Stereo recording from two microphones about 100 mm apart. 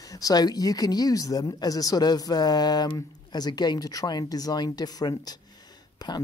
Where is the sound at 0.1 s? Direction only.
40° left (ahead or behind).